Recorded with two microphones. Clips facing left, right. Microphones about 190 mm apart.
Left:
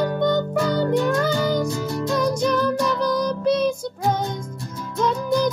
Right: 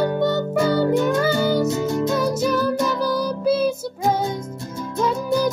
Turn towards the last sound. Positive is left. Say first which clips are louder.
# right 1 dB
turn(degrees=-5)  # may be behind; listen again after turning